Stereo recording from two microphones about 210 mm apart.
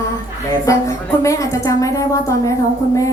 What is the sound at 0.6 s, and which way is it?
A woman's voice, 15° left (ahead or behind).